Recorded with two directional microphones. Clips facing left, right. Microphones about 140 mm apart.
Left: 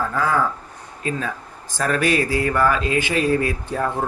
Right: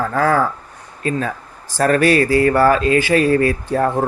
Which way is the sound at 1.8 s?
45° right (ahead or behind).